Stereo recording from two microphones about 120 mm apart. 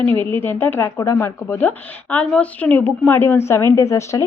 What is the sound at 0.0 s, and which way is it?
A woman's voice, 15° left (ahead or behind).